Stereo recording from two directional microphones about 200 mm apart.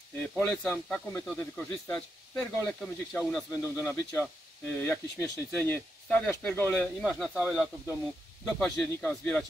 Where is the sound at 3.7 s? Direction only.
15° left (ahead or behind); by 7.4 s centre (ahead or behind).